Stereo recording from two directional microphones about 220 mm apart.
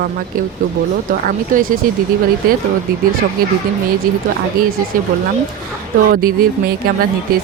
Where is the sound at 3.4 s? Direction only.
40° right (ahead or behind).